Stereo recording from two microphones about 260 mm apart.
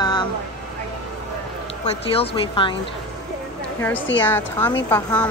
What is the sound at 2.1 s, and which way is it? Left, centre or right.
Speech, centre.